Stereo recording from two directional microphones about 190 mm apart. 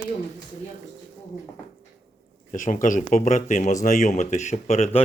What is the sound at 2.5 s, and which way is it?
Speech, 45° left (ahead or behind).